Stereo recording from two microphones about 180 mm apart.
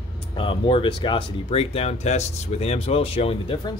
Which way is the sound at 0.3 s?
30° left (ahead or behind).